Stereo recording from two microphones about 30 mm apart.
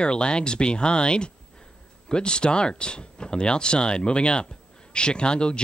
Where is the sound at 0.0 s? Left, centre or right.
Left.